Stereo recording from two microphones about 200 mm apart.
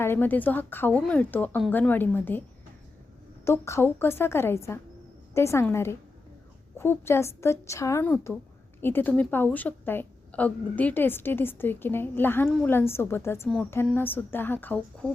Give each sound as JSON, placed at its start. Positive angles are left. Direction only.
{"t": 0.0, "sound": "a woman's voice", "side_deg": 10}
{"t": 3.4, "sound": "a woman's voice", "side_deg": 15}